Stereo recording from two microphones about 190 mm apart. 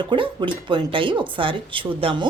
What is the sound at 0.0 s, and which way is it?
Speech, 25° right (ahead or behind).